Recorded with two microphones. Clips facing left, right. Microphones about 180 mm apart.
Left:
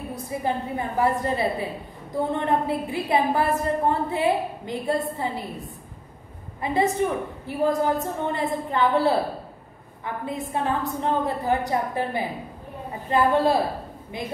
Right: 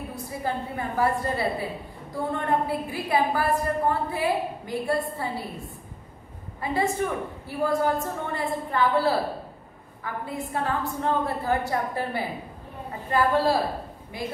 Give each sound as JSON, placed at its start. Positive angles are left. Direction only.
{"t": 0.1, "sound": "a woman's voice", "side_deg": 20}
{"t": 6.6, "sound": "a woman's voice", "side_deg": 20}